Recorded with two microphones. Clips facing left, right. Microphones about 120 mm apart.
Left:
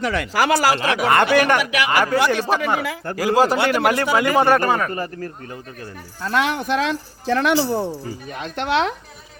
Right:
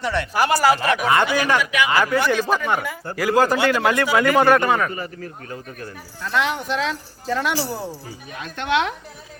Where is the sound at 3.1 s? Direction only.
30° left (ahead or behind).